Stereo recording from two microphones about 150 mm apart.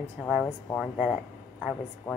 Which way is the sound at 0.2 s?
10° right (ahead or behind).